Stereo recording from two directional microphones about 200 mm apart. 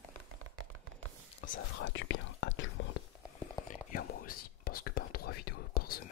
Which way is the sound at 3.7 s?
40° left (ahead or behind).